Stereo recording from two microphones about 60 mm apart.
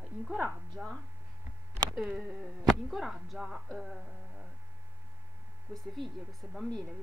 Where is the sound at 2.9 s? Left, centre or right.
Centre.